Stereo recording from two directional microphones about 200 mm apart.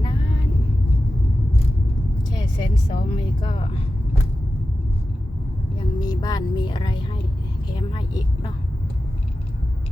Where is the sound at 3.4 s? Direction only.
25° left (ahead or behind).